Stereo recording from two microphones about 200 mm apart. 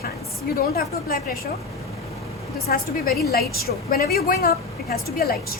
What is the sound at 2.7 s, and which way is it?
A woman's voice, 45° left (ahead or behind).